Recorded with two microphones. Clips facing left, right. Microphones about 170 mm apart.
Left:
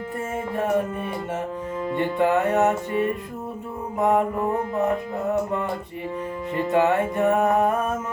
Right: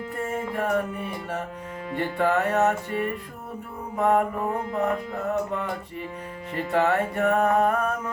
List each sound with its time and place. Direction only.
0.5 s music: 20° left (ahead or behind)
6.7 s music: 20° left (ahead or behind)